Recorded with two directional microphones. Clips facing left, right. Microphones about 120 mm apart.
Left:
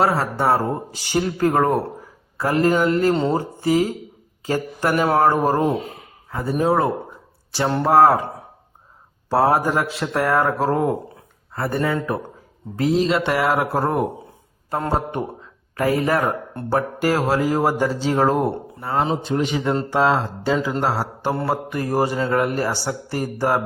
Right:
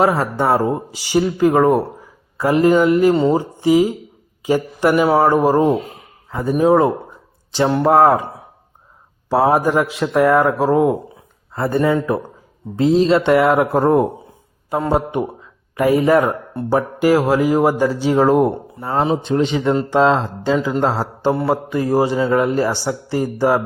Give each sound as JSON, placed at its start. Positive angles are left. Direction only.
{"t": 0.0, "sound": "speech", "side_deg": -15}
{"t": 7.7, "sound": "speech", "side_deg": -5}
{"t": 7.9, "sound": "speech", "side_deg": -15}
{"t": 9.3, "sound": "speech", "side_deg": -15}
{"t": 14.7, "sound": "a man's voice", "side_deg": -10}